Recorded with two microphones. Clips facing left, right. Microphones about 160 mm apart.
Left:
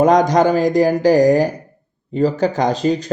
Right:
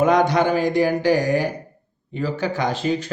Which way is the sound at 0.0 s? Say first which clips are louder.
Left 4 dB; 40° left (ahead or behind).